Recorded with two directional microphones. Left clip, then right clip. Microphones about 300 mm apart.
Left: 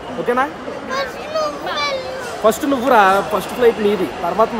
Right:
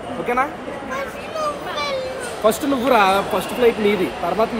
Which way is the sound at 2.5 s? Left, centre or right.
Left.